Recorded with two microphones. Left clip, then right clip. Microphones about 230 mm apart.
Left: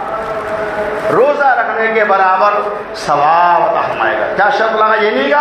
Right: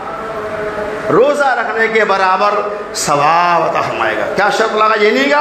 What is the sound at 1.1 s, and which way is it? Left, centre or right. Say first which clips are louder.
A man's voice: even; right.